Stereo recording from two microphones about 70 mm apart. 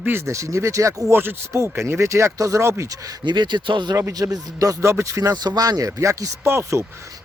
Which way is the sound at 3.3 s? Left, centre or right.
Right.